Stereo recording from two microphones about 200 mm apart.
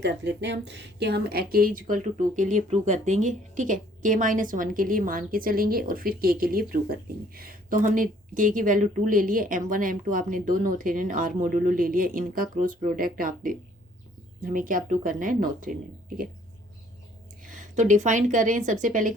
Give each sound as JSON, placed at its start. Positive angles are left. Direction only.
{"t": 0.0, "sound": "a woman's voice", "side_deg": -60}
{"t": 17.4, "sound": "a woman's voice", "side_deg": -40}